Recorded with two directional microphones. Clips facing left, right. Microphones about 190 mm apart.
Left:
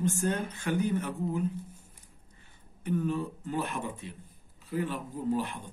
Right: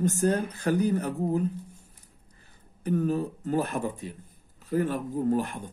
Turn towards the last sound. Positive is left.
turn(degrees=-50)  # may be behind; listen again after turning